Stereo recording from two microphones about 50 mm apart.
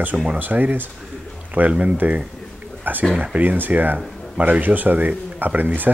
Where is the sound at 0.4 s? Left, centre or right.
Right.